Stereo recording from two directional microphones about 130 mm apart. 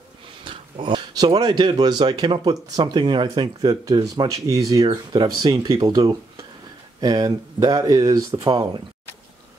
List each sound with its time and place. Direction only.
0.4 s speech: 40° right (ahead or behind)